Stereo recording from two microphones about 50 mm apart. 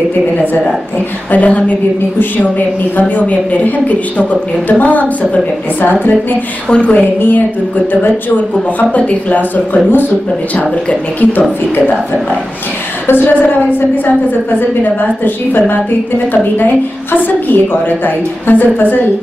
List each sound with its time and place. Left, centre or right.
1.3 s a woman's voice: left
6.7 s a woman's voice: left
7.2 s a woman's voice: left
10.5 s a woman's voice: left
13.0 s a woman's voice: left